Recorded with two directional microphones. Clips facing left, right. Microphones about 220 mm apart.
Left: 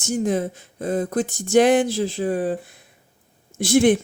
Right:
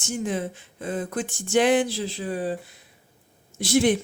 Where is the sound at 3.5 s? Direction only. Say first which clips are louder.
Left 4 dB; 50° left (ahead or behind).